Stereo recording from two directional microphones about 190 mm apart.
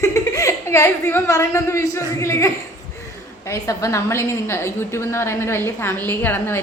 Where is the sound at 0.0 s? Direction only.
15° left (ahead or behind).